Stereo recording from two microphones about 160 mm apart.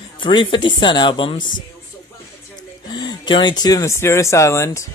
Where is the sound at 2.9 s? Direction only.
25° left (ahead or behind).